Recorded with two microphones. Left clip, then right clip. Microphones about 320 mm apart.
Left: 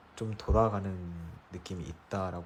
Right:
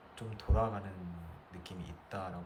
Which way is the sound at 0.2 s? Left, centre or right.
Centre.